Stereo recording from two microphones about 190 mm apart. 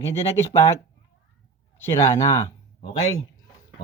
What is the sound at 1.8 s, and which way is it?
Speech, 15° left (ahead or behind).